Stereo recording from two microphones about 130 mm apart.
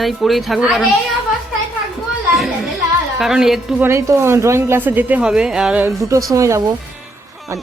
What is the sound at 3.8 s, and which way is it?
Speech, 20° right (ahead or behind).